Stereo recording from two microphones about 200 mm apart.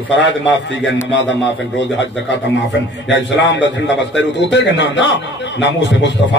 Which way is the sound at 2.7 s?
60° left (ahead or behind).